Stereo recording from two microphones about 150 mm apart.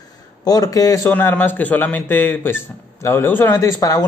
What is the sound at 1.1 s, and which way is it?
A man's voice, 10° left (ahead or behind).